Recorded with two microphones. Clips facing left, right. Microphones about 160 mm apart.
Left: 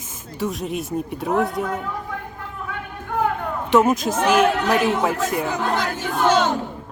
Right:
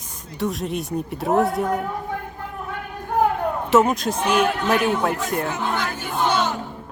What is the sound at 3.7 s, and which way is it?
Speech, centre (ahead or behind).